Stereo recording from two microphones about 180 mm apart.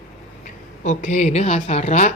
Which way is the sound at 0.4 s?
40° left (ahead or behind).